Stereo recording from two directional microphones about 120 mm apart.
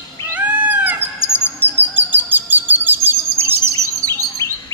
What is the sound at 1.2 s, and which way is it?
Bird, 20° left (ahead or behind).